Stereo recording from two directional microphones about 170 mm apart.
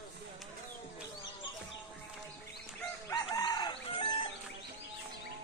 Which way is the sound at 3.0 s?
20° left (ahead or behind).